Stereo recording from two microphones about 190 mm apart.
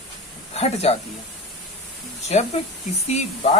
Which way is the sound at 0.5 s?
35° left (ahead or behind).